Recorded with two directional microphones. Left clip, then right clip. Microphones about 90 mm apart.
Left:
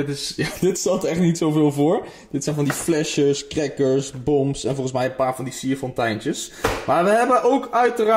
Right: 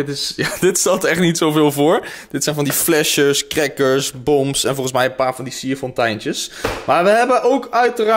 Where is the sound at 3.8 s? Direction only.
20° left (ahead or behind).